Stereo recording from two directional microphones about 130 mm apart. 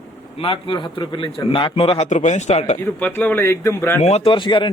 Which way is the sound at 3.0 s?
15° left (ahead or behind).